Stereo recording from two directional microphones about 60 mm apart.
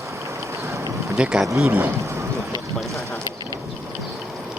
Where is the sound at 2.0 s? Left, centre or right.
Right.